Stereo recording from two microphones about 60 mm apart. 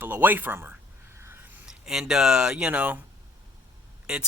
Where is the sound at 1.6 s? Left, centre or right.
Centre.